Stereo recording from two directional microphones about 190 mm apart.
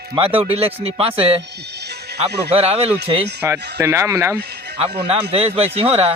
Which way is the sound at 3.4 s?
10° right (ahead or behind).